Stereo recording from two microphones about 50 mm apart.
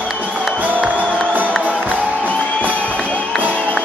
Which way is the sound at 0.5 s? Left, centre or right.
Right.